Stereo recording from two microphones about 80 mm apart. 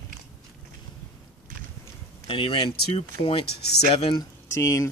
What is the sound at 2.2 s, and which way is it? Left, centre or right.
Speech, left.